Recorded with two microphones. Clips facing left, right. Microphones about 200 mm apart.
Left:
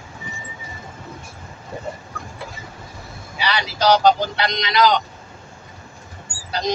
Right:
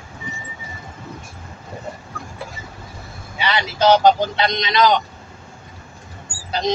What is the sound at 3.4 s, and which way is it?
Speech, 25° right (ahead or behind).